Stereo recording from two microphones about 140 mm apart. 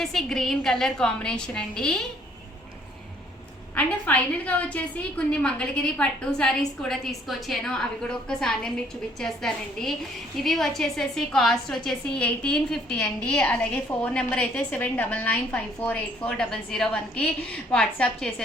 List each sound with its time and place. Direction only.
0.0 s a woman's voice: centre (ahead or behind)
3.8 s a woman's voice: 10° left (ahead or behind)